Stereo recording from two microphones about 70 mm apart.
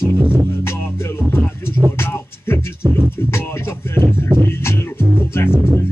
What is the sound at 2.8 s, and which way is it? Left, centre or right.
Music, right.